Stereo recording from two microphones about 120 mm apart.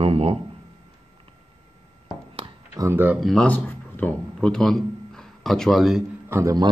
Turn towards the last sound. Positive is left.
turn(degrees=-25)  # may be behind; listen again after turning